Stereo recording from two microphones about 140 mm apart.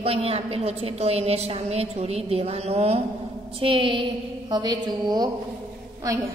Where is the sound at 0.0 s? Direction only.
45° right (ahead or behind); by 5.3 s 30° right (ahead or behind).